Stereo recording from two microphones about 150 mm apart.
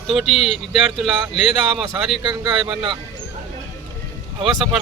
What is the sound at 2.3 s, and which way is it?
Speech, 30° right (ahead or behind).